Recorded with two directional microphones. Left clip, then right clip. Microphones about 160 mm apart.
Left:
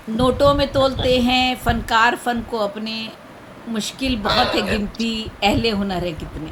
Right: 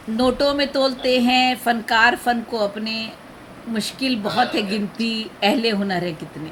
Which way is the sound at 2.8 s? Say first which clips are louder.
Right 1 dB; 65° right (ahead or behind).